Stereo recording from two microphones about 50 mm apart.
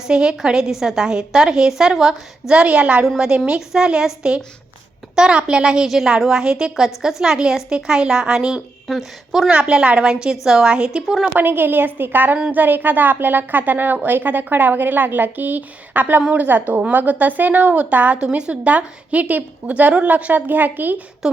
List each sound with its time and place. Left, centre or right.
0.0 s a woman's voice: centre
2.5 s a woman's voice: right
8.9 s speech: centre
9.5 s a woman's voice: right
11.0 s speech: centre
11.3 s a woman's voice: right